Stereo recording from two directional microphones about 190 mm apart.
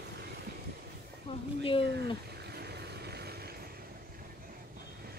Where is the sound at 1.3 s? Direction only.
30° left (ahead or behind).